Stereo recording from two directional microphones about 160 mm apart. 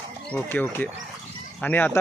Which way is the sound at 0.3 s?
10° left (ahead or behind).